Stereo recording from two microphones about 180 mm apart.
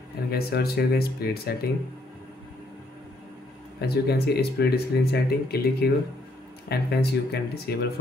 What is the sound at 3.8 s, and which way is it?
Speech, 60° left (ahead or behind).